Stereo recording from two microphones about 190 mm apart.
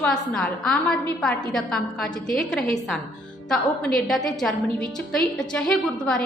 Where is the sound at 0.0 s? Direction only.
5° left (ahead or behind).